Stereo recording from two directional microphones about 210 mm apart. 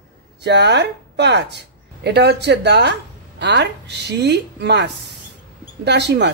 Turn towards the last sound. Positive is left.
turn(degrees=-55)  # may be behind; listen again after turning